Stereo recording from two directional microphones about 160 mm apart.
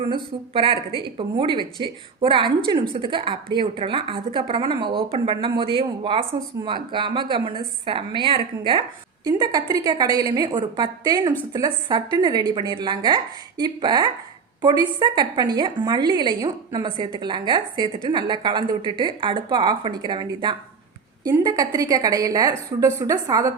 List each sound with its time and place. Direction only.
0.0 s a woman's voice: 35° right (ahead or behind)